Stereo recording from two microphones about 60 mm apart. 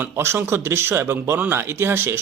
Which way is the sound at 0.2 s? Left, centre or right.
Right.